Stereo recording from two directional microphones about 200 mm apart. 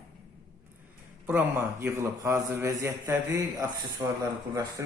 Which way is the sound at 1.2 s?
10° right (ahead or behind).